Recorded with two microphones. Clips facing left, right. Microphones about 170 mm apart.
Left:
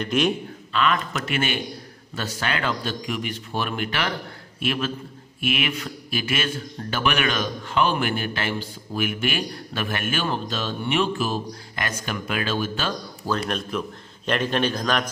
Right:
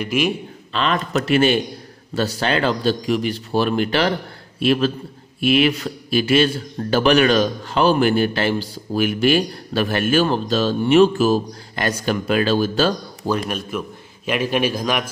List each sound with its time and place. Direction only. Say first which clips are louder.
0.0 s a man's voice: right 2 dB; 5° right (ahead or behind)
0.7 s a man's voice: right 3 dB; 30° right (ahead or behind)
13.5 s a man's voice: right 1 dB; 5° right (ahead or behind)